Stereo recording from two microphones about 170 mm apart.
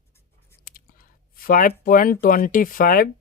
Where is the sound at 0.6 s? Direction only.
60° left (ahead or behind).